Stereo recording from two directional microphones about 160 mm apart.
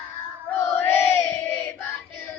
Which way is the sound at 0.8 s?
15° left (ahead or behind).